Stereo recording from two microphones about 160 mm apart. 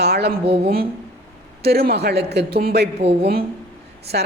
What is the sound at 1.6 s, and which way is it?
A man's voice, 85° right.